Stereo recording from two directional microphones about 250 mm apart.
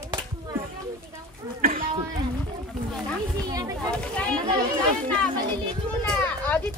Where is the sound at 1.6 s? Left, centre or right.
Right.